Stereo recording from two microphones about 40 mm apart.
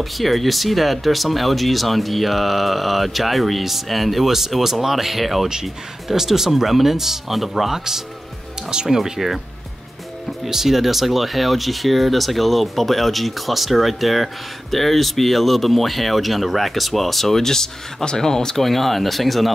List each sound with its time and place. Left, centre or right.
0.0 s speech: centre
5.5 s speech: centre
10.4 s speech: centre
18.7 s speech: centre